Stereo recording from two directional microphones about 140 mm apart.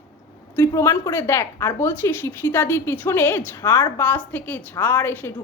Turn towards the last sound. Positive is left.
turn(degrees=15)  # may be behind; listen again after turning